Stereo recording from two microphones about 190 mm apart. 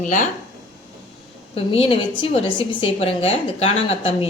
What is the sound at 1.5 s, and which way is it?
A woman's voice, 30° left (ahead or behind).